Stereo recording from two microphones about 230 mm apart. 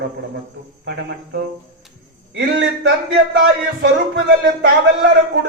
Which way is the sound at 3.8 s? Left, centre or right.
Right.